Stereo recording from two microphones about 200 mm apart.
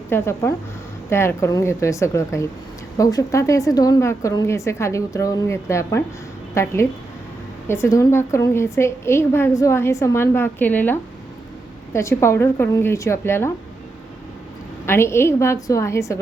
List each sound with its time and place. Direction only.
0.1 s a woman's voice: 15° left (ahead or behind)
11.9 s a woman's voice: 15° left (ahead or behind)
14.8 s a woman's voice: 15° left (ahead or behind)